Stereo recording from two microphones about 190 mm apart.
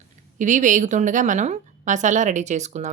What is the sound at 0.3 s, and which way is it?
A woman's voice, 40° right (ahead or behind).